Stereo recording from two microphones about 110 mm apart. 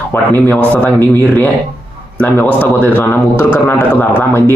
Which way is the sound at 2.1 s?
15° left (ahead or behind).